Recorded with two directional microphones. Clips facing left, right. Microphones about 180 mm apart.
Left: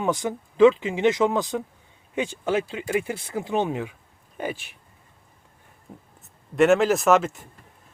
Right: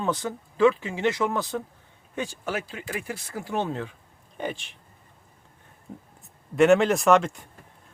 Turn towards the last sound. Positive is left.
turn(degrees=5)  # may be behind; listen again after turning